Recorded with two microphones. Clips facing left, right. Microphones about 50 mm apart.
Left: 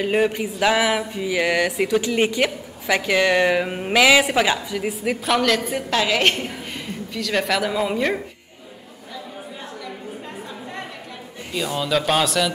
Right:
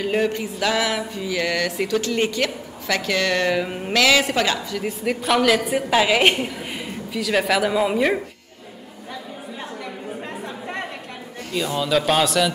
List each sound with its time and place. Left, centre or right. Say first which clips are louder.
0.0 s a sound: left 2 dB; centre
7.1 s a woman's voice: right 2 dB; centre
11.5 s a woman's voice: right 1 dB; centre